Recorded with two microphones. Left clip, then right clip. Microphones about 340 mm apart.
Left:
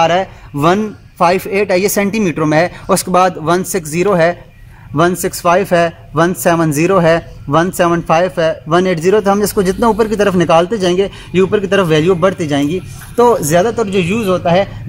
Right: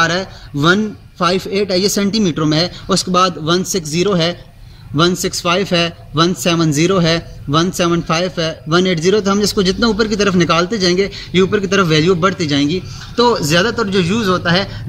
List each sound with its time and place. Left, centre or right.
0.0 s a man's voice: centre
1.2 s a man's voice: left
5.1 s a man's voice: left